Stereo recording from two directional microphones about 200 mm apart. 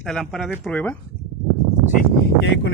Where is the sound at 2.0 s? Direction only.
55° left (ahead or behind).